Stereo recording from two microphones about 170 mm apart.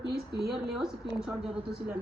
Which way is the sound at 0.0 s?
70° right (ahead or behind).